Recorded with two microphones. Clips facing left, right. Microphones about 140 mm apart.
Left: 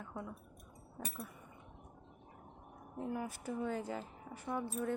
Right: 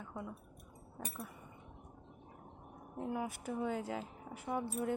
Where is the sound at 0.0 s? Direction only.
Centre (ahead or behind).